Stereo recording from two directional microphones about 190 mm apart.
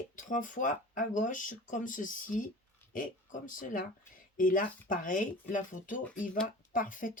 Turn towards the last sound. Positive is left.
turn(degrees=45)  # may be behind; listen again after turning